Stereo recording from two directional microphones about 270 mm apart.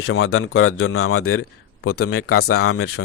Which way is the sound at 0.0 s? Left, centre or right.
Left.